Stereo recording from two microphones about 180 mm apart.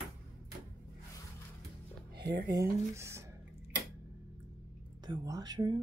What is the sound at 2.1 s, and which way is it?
Speech, 65° right (ahead or behind).